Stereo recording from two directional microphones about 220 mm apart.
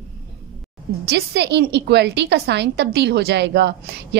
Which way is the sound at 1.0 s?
50° right (ahead or behind).